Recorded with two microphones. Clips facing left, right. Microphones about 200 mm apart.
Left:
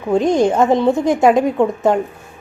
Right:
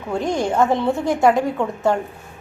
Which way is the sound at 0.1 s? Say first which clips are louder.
Left 7 dB; 20° left (ahead or behind).